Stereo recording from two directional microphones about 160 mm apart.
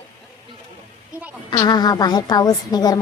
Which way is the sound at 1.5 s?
25° left (ahead or behind).